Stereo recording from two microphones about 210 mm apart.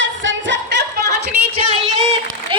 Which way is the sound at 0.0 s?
60° right (ahead or behind).